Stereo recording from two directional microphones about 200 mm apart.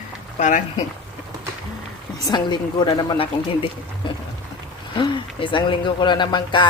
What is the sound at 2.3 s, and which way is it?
Speech, 20° left (ahead or behind).